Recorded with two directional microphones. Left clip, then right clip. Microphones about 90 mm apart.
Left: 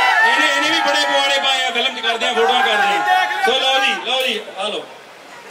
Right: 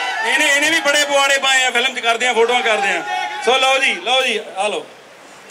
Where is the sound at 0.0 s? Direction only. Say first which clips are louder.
Left 5 dB; 40° left (ahead or behind).